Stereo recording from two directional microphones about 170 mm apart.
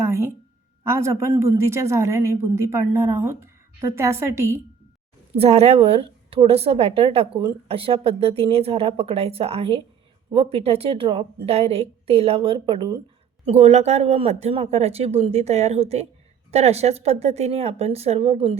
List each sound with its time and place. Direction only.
0.0 s a sound: 15° right (ahead or behind)
0.9 s a woman's voice: 15° right (ahead or behind)
5.3 s speech: 35° right (ahead or behind)